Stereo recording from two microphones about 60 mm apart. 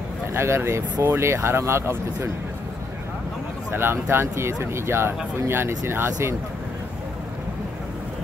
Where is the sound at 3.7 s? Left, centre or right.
Right.